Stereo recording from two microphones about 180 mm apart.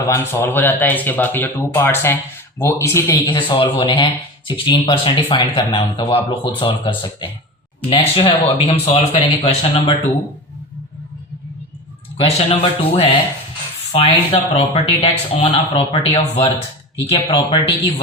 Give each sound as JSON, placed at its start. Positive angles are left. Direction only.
{"t": 0.1, "sound": "speech", "side_deg": 10}
{"t": 12.1, "sound": "speech", "side_deg": 35}